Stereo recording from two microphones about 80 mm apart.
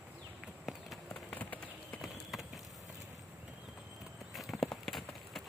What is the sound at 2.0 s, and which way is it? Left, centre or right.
Clip-clop, centre.